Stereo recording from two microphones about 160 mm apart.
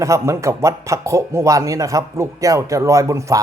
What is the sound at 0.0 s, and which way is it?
A man's voice, 20° right (ahead or behind).